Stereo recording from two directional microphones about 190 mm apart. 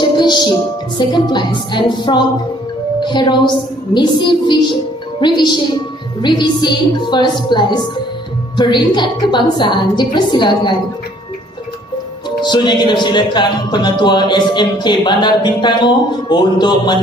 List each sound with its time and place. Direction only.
0.0 s music: 25° left (ahead or behind)
0.9 s speech: 25° left (ahead or behind)
12.4 s speech: 25° left (ahead or behind)